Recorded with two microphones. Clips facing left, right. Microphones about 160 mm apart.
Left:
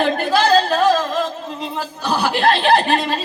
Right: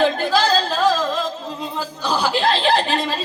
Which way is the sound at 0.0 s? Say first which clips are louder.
Left 1 dB; 60° left (ahead or behind).